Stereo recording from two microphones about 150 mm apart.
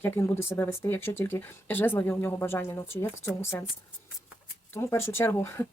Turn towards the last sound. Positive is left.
turn(degrees=15)  # may be behind; listen again after turning